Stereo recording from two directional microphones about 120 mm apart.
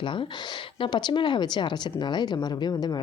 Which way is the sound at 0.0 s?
45° left (ahead or behind).